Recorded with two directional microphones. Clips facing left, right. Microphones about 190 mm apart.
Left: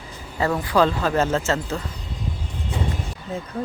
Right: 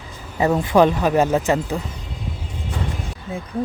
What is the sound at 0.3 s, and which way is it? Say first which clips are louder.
Speech: right 4 dB; 20° right (ahead or behind).